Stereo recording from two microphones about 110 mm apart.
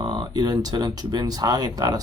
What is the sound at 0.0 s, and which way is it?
Speech, 40° right (ahead or behind).